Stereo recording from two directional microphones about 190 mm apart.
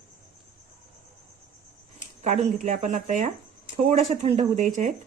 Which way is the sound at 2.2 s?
40° right (ahead or behind).